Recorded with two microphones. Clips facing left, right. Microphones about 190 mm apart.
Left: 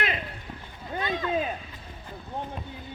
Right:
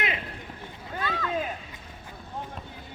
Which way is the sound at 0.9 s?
20° left (ahead or behind).